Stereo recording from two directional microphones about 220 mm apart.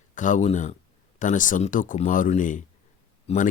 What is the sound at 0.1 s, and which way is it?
Speech, 35° left (ahead or behind).